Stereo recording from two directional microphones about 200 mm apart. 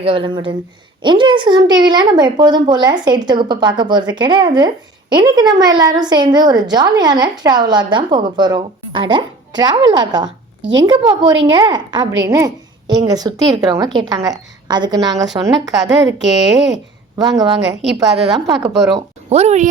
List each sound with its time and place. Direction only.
0.0 s a woman's voice: 25° right (ahead or behind)
10.2 s a sound: 65° right (ahead or behind)
10.8 s a woman's voice: 20° right (ahead or behind)
15.8 s a woman's voice: 60° right (ahead or behind)
17.2 s a woman's voice: 20° right (ahead or behind)
17.7 s a woman's voice: 60° right (ahead or behind)
18.3 s a woman's voice: 20° right (ahead or behind)